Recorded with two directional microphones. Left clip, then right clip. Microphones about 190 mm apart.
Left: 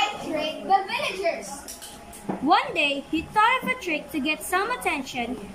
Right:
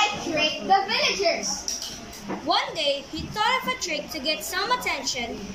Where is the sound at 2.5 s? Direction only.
55° left (ahead or behind).